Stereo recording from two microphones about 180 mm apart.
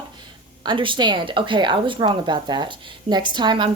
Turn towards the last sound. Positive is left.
turn(degrees=-25)  # may be behind; listen again after turning